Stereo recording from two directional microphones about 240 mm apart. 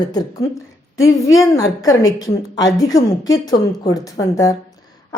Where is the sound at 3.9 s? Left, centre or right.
Centre.